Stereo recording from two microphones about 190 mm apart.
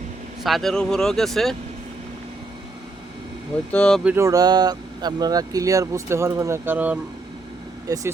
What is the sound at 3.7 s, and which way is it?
Speech, 5° left (ahead or behind).